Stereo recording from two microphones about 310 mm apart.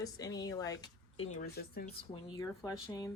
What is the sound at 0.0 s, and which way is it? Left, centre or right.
Speech, centre.